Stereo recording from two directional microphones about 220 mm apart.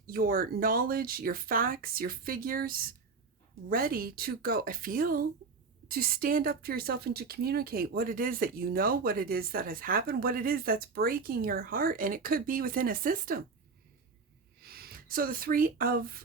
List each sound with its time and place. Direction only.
0.0 s a woman's voice: 40° right (ahead or behind)
14.6 s speech: 45° right (ahead or behind)